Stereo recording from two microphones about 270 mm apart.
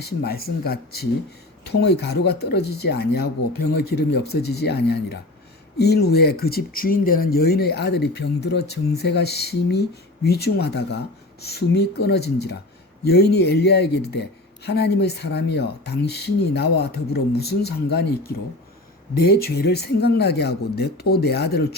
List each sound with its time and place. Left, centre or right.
0.0 s speech: left